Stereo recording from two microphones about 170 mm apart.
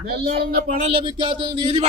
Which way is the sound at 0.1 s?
65° right (ahead or behind).